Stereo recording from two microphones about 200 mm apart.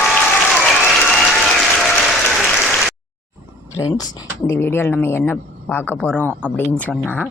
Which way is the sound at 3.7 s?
15° left (ahead or behind).